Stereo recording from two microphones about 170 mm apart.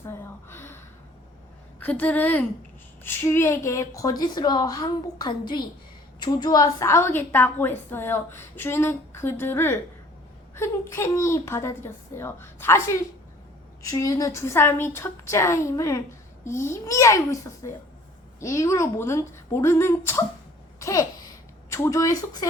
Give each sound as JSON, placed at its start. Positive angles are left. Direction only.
{"t": 0.1, "sound": "gasp", "side_deg": 15}
{"t": 1.8, "sound": "a woman's voice", "side_deg": 10}
{"t": 20.7, "sound": "babbling", "side_deg": 20}
{"t": 21.7, "sound": "a woman's voice", "side_deg": 20}